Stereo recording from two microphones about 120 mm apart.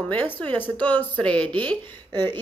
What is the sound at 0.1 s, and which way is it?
Speech, 15° left (ahead or behind).